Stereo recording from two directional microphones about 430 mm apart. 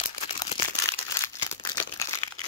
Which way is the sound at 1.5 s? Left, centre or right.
Centre.